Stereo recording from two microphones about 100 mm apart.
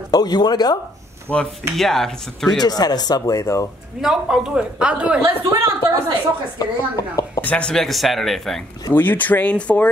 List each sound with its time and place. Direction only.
0.1 s speech: 45° left (ahead or behind)
1.3 s speech: 10° left (ahead or behind)
2.6 s speech: 40° left (ahead or behind)
4.0 s a woman's voice: 5° right (ahead or behind)
5.2 s a woman's voice: 30° right (ahead or behind)
6.6 s a woman's voice: 35° left (ahead or behind)
7.4 s speech: 10° left (ahead or behind)
8.9 s speech: 20° left (ahead or behind)